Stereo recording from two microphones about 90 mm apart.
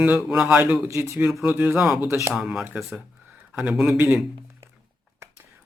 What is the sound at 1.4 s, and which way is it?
Speech, 20° right (ahead or behind).